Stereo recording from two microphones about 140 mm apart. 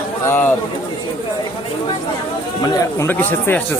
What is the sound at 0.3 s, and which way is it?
Speech, 15° left (ahead or behind).